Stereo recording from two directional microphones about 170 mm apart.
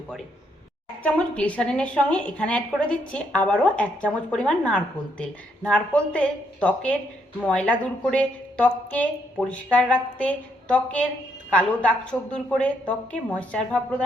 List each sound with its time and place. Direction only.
1.0 s speech: 5° left (ahead or behind)